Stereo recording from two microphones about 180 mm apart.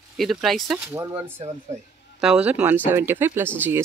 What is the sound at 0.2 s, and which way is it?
Speech, centre (ahead or behind).